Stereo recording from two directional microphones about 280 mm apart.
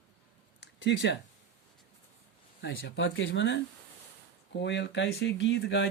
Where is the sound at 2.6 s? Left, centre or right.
Left.